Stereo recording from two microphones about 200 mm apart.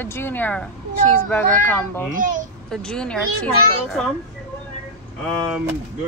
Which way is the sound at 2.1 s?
40° right (ahead or behind).